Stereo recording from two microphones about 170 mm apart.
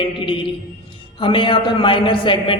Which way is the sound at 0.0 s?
30° left (ahead or behind).